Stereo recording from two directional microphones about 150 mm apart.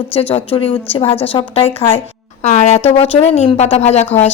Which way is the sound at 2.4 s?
50° left (ahead or behind).